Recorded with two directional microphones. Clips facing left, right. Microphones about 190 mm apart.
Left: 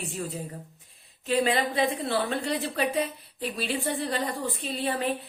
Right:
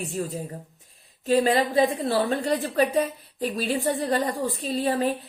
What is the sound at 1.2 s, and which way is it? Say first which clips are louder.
A woman's voice: right 4 dB; 40° right (ahead or behind).